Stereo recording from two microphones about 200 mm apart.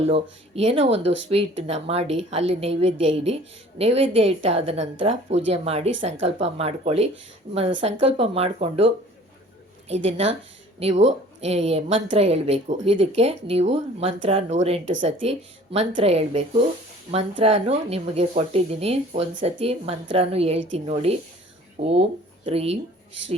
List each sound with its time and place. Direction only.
0.0 s speech: 30° right (ahead or behind)
9.9 s speech: 30° right (ahead or behind)